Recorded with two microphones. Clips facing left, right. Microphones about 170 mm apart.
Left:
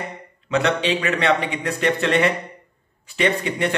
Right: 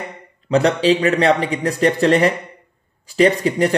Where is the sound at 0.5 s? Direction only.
35° right (ahead or behind).